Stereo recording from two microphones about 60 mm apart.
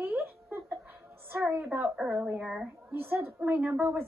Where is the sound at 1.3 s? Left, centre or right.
Right.